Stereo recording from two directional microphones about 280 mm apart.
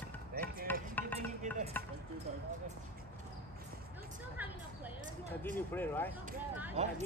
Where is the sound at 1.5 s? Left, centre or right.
Right.